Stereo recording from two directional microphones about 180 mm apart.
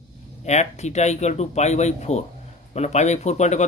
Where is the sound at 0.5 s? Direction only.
40° left (ahead or behind).